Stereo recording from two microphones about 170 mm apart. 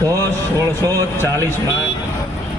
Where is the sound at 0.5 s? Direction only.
20° right (ahead or behind).